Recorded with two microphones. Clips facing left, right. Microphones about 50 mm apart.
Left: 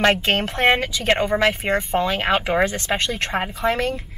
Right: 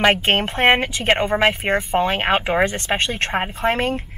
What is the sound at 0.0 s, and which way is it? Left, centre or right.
Speech, right.